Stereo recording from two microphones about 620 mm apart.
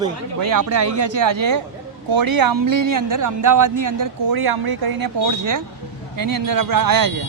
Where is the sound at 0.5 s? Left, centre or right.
Right.